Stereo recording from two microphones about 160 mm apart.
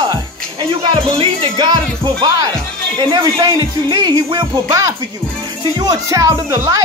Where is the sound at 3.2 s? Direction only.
25° right (ahead or behind).